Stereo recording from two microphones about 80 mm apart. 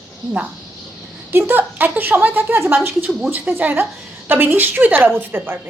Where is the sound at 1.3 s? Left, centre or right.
Right.